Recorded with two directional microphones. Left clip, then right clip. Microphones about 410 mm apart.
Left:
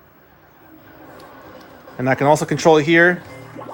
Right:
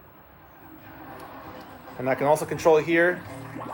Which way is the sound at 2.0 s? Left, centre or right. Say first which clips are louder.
Left 7 dB; left.